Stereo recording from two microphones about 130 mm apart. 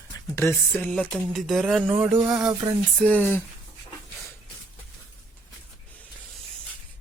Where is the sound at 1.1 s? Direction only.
5° right (ahead or behind).